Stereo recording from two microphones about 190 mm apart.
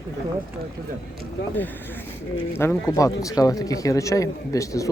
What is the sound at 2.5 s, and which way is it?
Speech, 15° left (ahead or behind).